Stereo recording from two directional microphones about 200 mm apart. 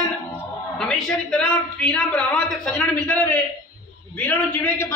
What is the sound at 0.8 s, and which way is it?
A man's voice, 5° left (ahead or behind).